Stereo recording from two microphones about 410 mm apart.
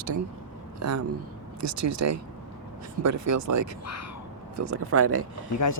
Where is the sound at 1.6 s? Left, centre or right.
Right.